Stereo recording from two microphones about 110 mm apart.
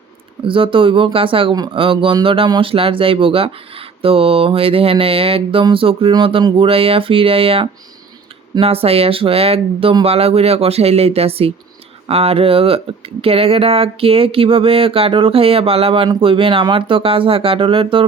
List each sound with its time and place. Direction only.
0.4 s speech: 55° right (ahead or behind)